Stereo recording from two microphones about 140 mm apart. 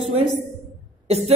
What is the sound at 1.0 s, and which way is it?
Cough, 50° right (ahead or behind).